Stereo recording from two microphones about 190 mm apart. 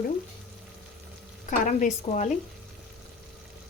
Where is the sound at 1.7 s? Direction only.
40° left (ahead or behind).